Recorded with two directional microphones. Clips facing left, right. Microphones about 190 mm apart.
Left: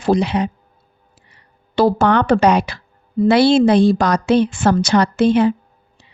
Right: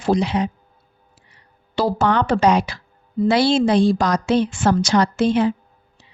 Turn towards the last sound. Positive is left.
turn(degrees=60)  # may be behind; listen again after turning